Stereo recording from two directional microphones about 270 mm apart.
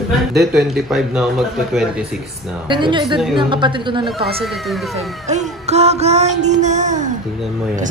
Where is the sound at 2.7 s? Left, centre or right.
Centre.